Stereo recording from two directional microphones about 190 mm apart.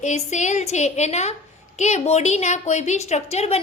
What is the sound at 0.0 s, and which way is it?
A woman's voice, 40° left (ahead or behind).